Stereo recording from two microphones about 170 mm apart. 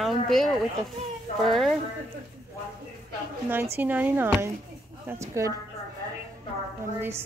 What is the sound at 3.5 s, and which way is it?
Speech, 10° right (ahead or behind).